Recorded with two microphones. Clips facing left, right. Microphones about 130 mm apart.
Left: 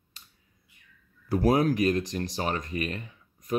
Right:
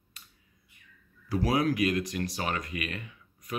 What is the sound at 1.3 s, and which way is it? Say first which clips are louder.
Speech: left 4 dB; 45° left (ahead or behind).